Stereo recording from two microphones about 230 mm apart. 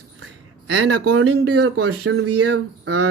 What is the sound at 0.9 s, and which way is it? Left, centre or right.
Speech, right.